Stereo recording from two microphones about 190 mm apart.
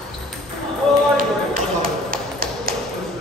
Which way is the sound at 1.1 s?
45° right (ahead or behind).